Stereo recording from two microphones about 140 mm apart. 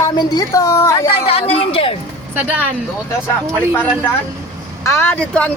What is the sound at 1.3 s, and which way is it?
Speech, 45° left (ahead or behind).